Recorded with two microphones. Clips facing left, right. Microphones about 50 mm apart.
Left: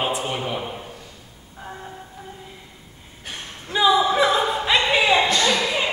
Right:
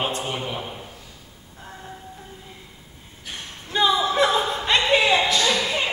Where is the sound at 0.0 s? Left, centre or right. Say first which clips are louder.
Left 2 dB; centre.